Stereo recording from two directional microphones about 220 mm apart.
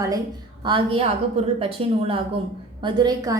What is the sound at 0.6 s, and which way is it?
A woman's voice, 25° right (ahead or behind).